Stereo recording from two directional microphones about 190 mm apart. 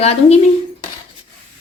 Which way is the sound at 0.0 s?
35° left (ahead or behind).